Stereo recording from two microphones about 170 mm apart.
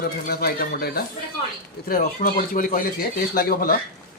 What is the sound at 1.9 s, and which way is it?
Speech, 55° left (ahead or behind).